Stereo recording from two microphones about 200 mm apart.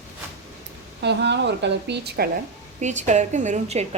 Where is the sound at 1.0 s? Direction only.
60° right (ahead or behind).